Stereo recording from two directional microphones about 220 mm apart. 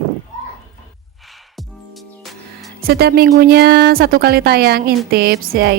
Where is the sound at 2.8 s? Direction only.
45° right (ahead or behind).